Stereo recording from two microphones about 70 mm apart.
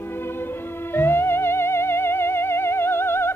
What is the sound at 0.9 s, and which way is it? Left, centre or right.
Music, left.